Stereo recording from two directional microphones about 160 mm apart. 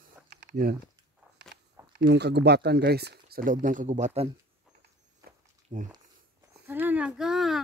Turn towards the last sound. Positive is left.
turn(degrees=0)  # may be behind; listen again after turning